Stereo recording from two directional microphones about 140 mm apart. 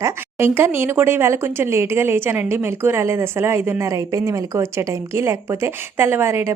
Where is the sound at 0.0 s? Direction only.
20° right (ahead or behind).